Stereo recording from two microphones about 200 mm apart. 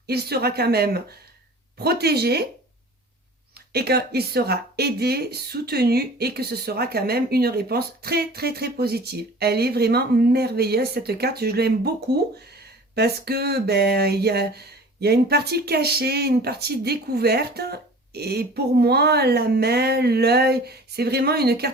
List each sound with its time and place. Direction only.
0.1 s speech: 55° right (ahead or behind)
3.7 s speech: 50° right (ahead or behind)